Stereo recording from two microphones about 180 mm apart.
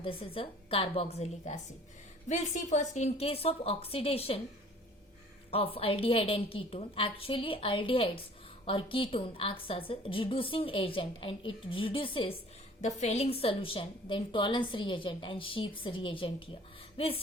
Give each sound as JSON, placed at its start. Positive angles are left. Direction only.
{"t": 0.0, "sound": "a woman's voice", "side_deg": 30}
{"t": 5.5, "sound": "a woman's voice", "side_deg": 30}